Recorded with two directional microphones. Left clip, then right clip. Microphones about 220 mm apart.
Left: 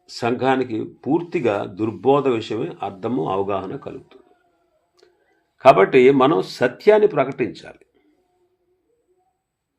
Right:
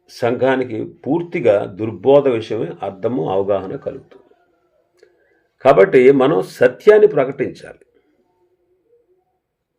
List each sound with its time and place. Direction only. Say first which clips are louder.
0.0 s speech: right 4 dB; 25° left (ahead or behind)
5.5 s speech: right 2 dB; 25° left (ahead or behind)